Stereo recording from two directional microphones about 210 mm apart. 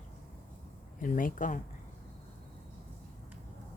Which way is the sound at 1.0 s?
40° left (ahead or behind).